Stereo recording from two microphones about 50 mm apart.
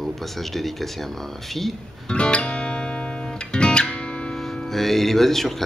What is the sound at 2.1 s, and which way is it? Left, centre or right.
Music, left.